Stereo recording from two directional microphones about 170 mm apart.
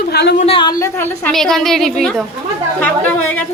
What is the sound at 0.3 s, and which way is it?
Speech, 35° left (ahead or behind).